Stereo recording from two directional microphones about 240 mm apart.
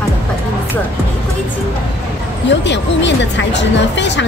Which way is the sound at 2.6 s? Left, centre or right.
Left.